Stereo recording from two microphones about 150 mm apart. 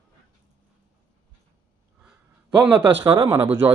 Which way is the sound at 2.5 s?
10° right (ahead or behind).